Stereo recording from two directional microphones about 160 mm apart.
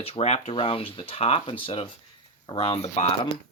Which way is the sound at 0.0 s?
40° left (ahead or behind).